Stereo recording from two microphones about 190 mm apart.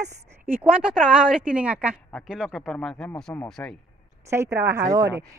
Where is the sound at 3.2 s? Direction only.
10° left (ahead or behind).